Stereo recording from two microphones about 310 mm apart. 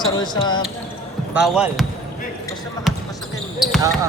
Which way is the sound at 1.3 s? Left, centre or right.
Centre.